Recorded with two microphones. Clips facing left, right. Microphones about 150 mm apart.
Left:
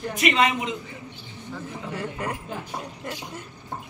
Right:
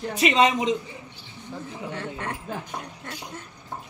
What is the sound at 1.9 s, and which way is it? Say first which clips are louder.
Speech: left 3 dB; 5° left (ahead or behind).